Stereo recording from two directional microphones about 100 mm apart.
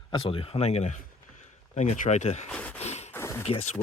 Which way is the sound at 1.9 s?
90° left.